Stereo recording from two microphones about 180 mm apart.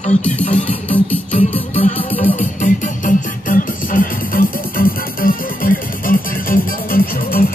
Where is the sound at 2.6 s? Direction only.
45° left (ahead or behind).